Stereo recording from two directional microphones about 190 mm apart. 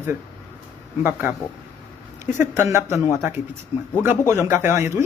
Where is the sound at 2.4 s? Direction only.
15° right (ahead or behind).